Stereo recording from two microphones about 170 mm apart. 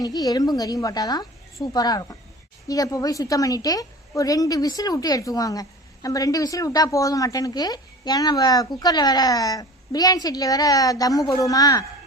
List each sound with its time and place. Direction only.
0.0 s a woman's voice: 20° left (ahead or behind)